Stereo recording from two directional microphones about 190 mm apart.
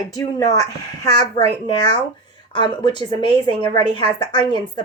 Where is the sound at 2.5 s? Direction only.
25° left (ahead or behind).